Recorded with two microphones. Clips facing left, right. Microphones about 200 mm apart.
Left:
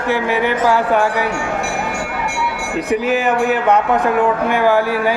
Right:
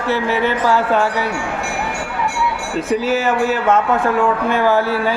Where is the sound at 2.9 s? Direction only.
15° left (ahead or behind).